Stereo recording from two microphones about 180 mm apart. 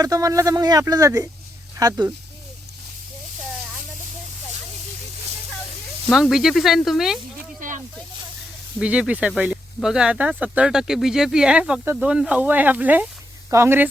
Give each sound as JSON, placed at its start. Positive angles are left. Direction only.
{"t": 0.0, "sound": "speech", "side_deg": -20}
{"t": 6.1, "sound": "speech", "side_deg": 0}
{"t": 8.8, "sound": "speech", "side_deg": -5}